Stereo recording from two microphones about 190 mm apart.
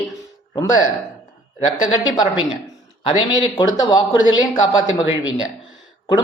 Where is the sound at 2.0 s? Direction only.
20° left (ahead or behind).